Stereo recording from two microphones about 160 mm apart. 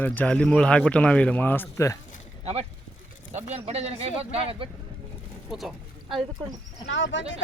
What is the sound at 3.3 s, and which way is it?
Speech, 40° right (ahead or behind).